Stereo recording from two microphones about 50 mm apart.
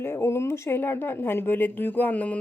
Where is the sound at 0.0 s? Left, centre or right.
Left.